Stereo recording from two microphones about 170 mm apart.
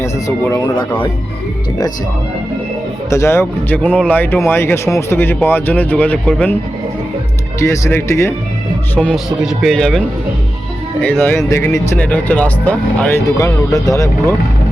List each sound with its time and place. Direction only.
0.0 s speech: 15° left (ahead or behind)
3.1 s speech: 15° left (ahead or behind)
7.6 s speech: 15° left (ahead or behind)
9.0 s speech: centre (ahead or behind)
11.4 s speech: 20° left (ahead or behind)